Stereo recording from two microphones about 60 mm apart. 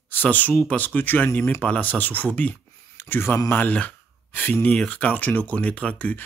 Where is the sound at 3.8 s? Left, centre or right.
Left.